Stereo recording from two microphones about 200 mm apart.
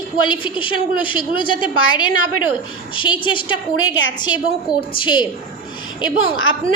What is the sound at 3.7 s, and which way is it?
Speech, 75° left (ahead or behind).